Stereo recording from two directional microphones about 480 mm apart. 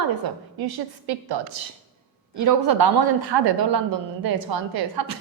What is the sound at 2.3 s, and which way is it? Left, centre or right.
A woman's voice, right.